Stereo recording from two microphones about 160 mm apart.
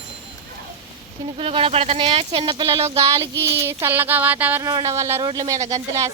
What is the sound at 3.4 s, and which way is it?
Child singing, 15° right (ahead or behind).